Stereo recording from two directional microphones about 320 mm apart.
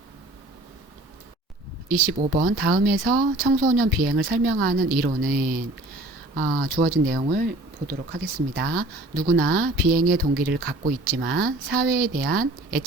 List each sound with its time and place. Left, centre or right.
1.9 s speech: right